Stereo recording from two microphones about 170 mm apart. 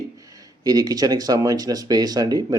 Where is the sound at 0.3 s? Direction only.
20° right (ahead or behind).